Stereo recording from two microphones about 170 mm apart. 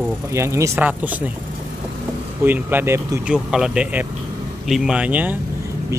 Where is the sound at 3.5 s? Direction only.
5° right (ahead or behind).